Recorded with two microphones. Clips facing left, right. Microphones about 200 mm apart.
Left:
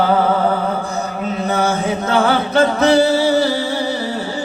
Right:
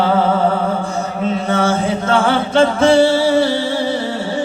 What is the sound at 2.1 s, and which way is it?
Music, 30° right (ahead or behind).